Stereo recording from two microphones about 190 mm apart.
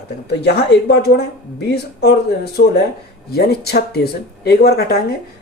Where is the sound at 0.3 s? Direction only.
60° left (ahead or behind).